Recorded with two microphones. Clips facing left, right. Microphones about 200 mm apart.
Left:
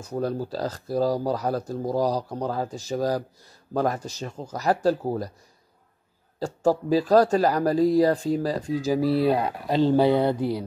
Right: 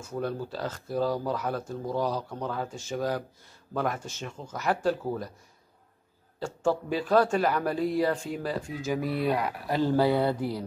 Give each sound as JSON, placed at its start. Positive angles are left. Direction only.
{"t": 0.0, "sound": "speech", "side_deg": 35}
{"t": 6.4, "sound": "speech", "side_deg": 35}